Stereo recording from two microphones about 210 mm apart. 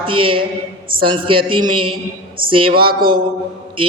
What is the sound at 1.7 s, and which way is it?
Speech, 90° right.